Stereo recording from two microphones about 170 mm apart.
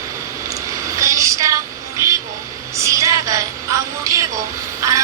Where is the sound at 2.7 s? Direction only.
20° right (ahead or behind).